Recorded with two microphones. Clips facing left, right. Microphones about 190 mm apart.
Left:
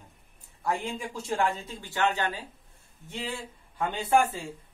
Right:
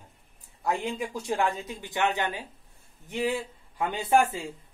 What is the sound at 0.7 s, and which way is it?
Speech, 15° right (ahead or behind).